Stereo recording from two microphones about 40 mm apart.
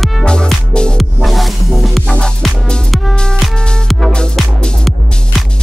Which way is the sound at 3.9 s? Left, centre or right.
Centre.